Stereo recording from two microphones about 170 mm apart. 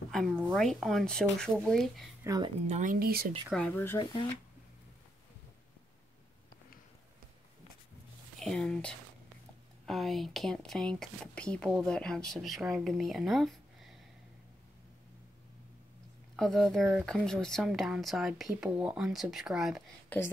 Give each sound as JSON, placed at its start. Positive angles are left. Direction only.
{"t": 0.1, "sound": "a woman's voice", "side_deg": 0}
{"t": 2.2, "sound": "a woman's voice", "side_deg": -20}
{"t": 2.6, "sound": "speech", "side_deg": -45}
{"t": 3.4, "sound": "speech", "side_deg": 5}
{"t": 8.4, "sound": "speech", "side_deg": 5}
{"t": 16.3, "sound": "speech", "side_deg": 0}
{"t": 20.1, "sound": "speech", "side_deg": 10}